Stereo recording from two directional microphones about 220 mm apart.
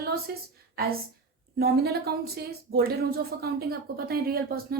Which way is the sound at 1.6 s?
45° right (ahead or behind).